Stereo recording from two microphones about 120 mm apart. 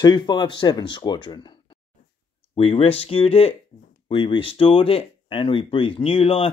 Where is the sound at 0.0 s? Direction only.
35° left (ahead or behind).